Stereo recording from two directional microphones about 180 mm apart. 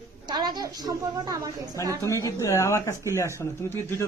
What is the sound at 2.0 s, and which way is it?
Speech, 15° left (ahead or behind).